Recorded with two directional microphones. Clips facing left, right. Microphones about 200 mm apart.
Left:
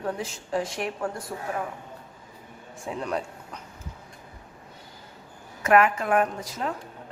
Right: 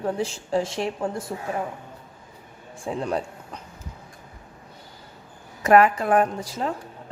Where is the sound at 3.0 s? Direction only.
30° right (ahead or behind).